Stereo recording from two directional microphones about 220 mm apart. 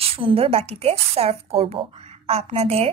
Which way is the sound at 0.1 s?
25° right (ahead or behind).